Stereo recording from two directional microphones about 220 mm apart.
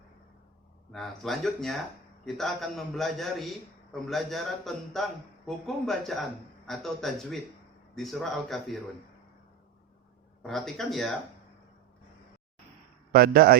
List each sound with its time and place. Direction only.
0.9 s a man's voice: centre (ahead or behind)
10.4 s a man's voice: centre (ahead or behind)
13.1 s a man's voice: 40° right (ahead or behind)